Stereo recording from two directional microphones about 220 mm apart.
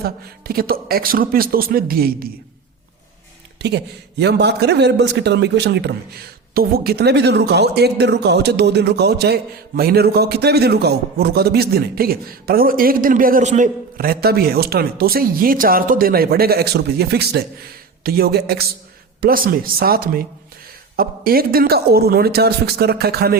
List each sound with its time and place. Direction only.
0.0 s speech: 45° right (ahead or behind)
3.6 s speech: 50° right (ahead or behind)